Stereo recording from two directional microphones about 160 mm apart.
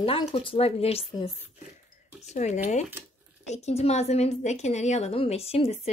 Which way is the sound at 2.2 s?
45° left (ahead or behind).